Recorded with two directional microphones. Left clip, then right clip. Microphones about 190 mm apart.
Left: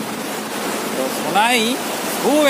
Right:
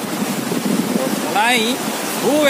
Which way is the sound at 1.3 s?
5° left (ahead or behind).